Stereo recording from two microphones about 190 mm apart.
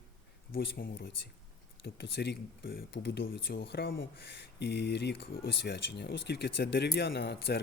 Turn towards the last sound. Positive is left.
turn(degrees=60)  # may be behind; listen again after turning